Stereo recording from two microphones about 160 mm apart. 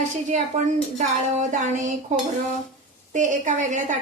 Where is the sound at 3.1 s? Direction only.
50° right (ahead or behind).